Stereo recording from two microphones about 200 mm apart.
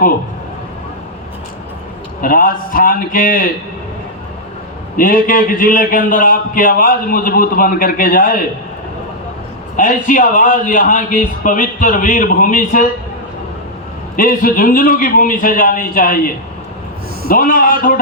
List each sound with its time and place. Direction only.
2.2 s a man's voice: 45° left (ahead or behind)
4.9 s a man's voice: 45° left (ahead or behind)
9.7 s a man's voice: 40° left (ahead or behind)
14.2 s a man's voice: 45° left (ahead or behind)